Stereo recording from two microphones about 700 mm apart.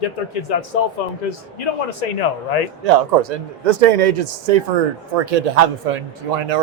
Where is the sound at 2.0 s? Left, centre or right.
Left.